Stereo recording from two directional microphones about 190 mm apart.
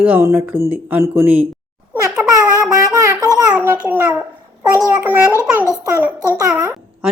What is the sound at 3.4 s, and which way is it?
A child's voice, 5° right (ahead or behind).